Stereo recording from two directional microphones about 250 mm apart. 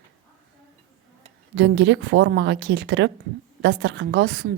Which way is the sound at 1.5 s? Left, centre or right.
Right.